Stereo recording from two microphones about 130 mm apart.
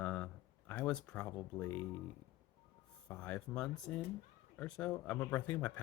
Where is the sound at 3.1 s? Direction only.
10° left (ahead or behind).